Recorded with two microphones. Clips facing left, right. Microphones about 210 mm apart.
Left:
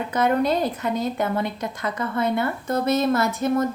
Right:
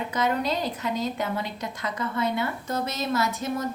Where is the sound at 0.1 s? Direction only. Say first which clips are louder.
Left 7 dB; 55° left (ahead or behind).